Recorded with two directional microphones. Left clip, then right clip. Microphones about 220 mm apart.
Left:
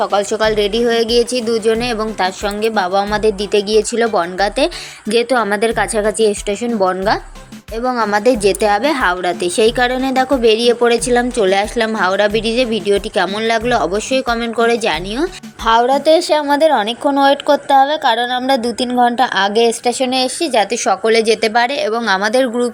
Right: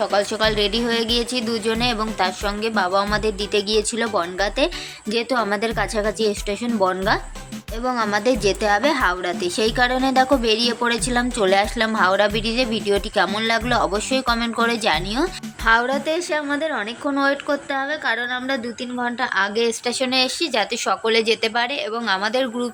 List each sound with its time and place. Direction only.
0.0 s a woman's voice: 10° left (ahead or behind)